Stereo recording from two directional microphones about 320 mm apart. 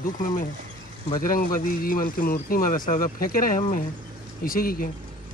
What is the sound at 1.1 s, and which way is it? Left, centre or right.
Speech, left.